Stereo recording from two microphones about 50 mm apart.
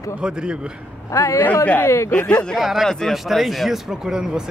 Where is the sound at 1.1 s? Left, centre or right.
Left.